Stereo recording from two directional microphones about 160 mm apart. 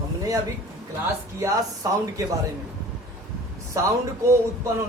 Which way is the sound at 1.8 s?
20° right (ahead or behind).